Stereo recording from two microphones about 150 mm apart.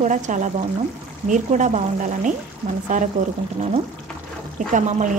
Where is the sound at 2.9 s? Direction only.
55° right (ahead or behind).